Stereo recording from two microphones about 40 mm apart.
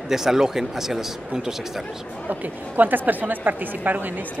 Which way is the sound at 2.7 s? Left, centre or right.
Right.